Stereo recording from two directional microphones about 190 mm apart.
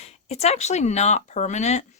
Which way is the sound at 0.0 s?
35° left (ahead or behind).